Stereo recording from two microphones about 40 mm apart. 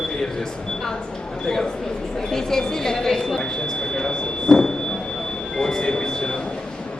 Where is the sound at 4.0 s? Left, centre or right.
Centre.